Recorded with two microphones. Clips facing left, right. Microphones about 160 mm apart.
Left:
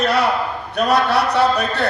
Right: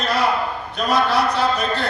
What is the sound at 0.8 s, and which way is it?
Speech, 70° left (ahead or behind).